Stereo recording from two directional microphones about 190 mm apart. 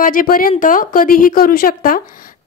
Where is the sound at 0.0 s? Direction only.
50° left (ahead or behind).